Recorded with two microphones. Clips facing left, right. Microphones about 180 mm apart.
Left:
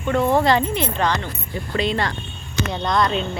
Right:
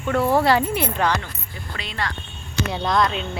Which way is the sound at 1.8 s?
25° left (ahead or behind).